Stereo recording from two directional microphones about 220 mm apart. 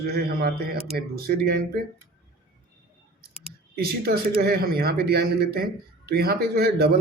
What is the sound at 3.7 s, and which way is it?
A man's voice, 45° right (ahead or behind).